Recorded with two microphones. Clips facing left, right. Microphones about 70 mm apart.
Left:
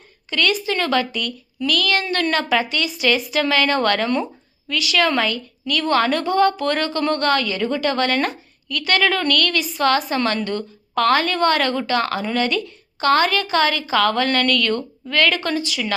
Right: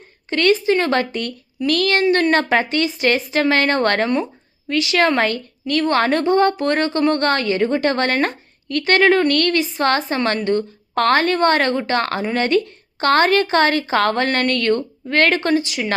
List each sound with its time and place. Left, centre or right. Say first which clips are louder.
0.3 s a woman's voice: right 5 dB; right
2.0 s speech: right 6 dB; right
2.3 s a woman's voice: right 3 dB; right
10.9 s a woman's voice: right 2 dB; right